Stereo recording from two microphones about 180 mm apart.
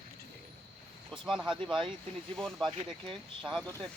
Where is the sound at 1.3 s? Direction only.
5° right (ahead or behind).